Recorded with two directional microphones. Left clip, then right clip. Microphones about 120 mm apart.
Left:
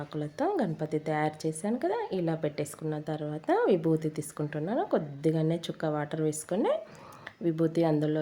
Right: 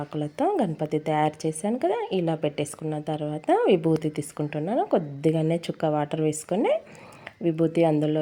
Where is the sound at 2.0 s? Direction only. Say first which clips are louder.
Right 5 dB; 35° left (ahead or behind).